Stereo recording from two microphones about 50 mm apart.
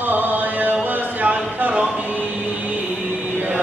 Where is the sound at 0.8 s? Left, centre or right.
Right.